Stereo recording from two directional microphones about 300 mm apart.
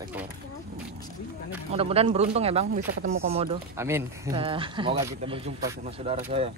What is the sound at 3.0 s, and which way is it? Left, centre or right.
Speech, right.